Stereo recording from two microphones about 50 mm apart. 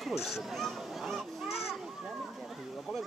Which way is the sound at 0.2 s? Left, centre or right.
Centre.